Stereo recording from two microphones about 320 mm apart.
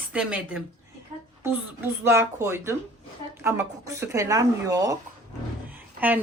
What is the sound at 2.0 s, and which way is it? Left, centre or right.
Speech, centre.